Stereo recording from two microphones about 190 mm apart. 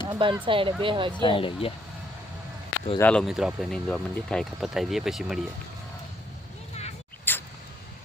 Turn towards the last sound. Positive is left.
turn(degrees=10)  # may be behind; listen again after turning